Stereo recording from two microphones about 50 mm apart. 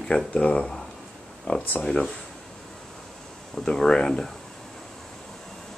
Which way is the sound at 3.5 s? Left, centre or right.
Centre.